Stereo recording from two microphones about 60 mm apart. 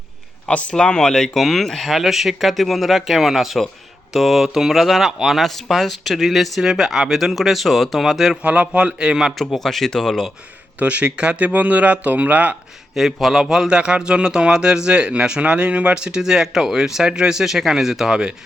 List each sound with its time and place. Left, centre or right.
0.4 s speech: centre
8.4 s speech: right
9.4 s speech: centre
10.8 s speech: right
12.9 s speech: centre
13.4 s speech: centre